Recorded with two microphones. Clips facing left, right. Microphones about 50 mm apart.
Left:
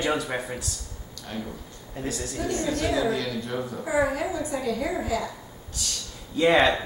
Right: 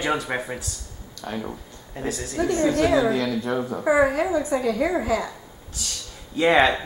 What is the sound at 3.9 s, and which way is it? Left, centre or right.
Speech, right.